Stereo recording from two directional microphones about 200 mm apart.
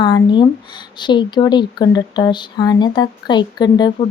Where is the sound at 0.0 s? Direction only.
25° left (ahead or behind).